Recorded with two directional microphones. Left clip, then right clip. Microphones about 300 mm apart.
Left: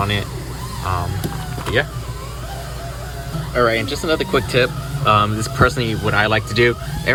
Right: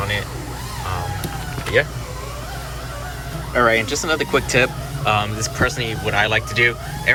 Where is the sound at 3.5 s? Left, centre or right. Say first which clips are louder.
Right 1 dB; centre.